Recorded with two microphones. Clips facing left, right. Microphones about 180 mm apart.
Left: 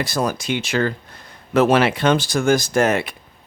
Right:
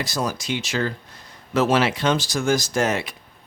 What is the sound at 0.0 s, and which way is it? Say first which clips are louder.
Speech: left 4 dB; 55° left (ahead or behind).